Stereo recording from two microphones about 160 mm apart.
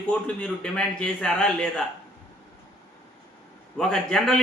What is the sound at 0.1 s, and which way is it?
A man's voice, 5° left (ahead or behind).